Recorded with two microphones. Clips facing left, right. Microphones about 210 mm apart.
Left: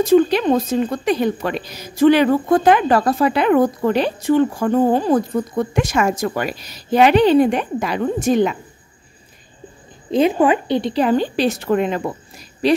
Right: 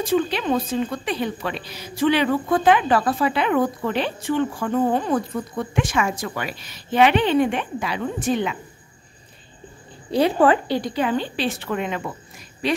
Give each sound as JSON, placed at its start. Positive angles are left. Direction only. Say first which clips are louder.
{"t": 0.0, "sound": "a woman's voice", "louder": "left 8 dB", "side_deg": 45}
{"t": 10.1, "sound": "a woman's voice", "louder": "left 2 dB", "side_deg": 20}
{"t": 10.9, "sound": "a woman's voice", "louder": "left 6 dB", "side_deg": 40}